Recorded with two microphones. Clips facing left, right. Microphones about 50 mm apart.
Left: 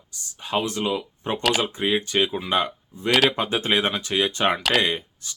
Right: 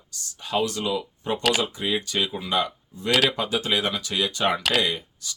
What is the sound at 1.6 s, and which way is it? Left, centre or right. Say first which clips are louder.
Speech: left 3 dB; left.